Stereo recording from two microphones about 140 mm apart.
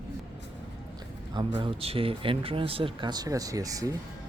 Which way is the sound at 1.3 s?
35° right (ahead or behind).